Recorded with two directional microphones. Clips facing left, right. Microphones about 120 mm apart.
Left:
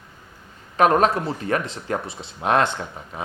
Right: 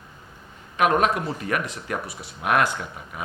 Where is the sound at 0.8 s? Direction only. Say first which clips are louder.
Left 3 dB; 35° left (ahead or behind).